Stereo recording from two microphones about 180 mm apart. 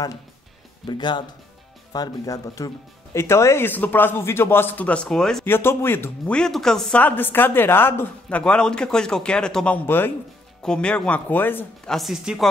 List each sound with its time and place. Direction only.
0.8 s speech: 25° left (ahead or behind); by 12.4 s centre (ahead or behind)